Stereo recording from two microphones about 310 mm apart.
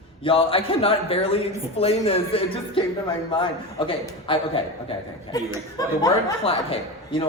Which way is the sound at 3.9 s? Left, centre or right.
Centre.